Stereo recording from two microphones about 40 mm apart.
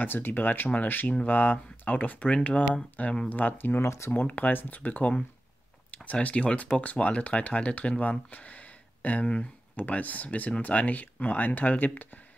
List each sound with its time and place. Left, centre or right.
0.0 s speech: left
3.3 s speech: left
4.3 s speech: left
6.1 s speech: left